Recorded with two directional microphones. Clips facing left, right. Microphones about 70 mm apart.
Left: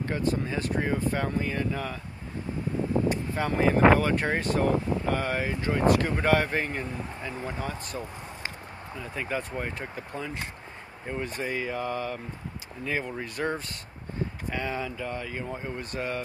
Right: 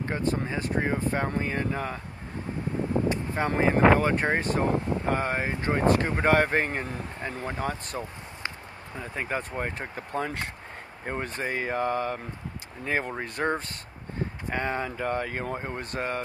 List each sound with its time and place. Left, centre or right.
0.1 s speech: right
3.3 s speech: right